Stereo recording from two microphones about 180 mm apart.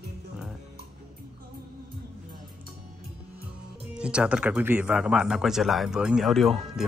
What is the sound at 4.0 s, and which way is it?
A man's voice, 5° right (ahead or behind).